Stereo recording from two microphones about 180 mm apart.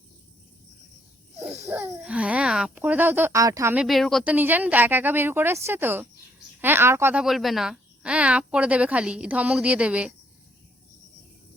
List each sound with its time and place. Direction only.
1.4 s speech: 15° right (ahead or behind)
3.8 s speech: centre (ahead or behind)